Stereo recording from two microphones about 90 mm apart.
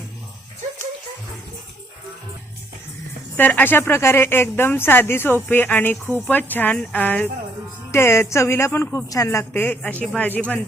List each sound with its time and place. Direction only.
3.3 s speech: 20° left (ahead or behind)
7.9 s a woman's voice: 30° left (ahead or behind)
9.5 s speech: 20° left (ahead or behind)